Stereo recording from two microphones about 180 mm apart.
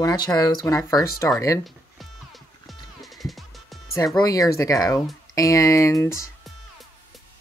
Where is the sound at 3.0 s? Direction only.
Centre (ahead or behind).